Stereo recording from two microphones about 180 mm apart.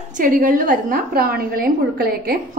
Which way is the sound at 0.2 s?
50° right (ahead or behind).